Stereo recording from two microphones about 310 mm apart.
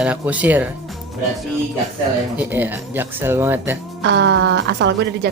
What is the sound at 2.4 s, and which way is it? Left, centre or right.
Speech, centre.